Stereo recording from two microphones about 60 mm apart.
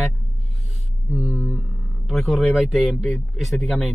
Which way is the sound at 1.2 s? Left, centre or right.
Left.